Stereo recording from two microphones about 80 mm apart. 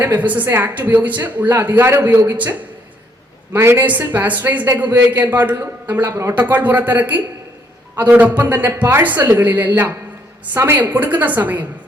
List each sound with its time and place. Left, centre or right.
0.0 s a woman's voice: right
3.5 s a man's voice: right
10.8 s a woman's voice: right